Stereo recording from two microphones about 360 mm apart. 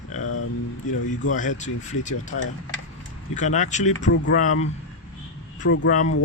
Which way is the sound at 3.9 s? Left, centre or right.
Left.